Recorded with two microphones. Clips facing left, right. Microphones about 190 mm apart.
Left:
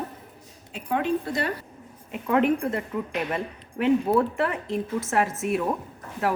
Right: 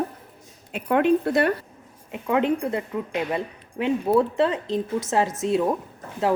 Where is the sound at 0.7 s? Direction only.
60° right (ahead or behind).